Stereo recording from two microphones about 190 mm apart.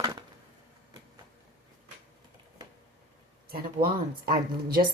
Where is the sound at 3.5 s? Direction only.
50° right (ahead or behind).